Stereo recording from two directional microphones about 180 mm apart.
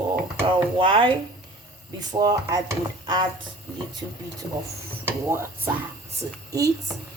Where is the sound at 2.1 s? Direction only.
20° right (ahead or behind).